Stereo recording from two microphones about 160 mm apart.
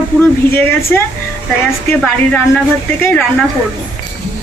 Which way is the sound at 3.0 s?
10° left (ahead or behind).